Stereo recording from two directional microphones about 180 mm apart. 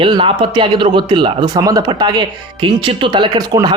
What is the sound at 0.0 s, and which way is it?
Speech, 30° right (ahead or behind).